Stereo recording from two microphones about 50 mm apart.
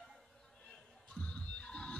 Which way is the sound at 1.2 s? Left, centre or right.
Left.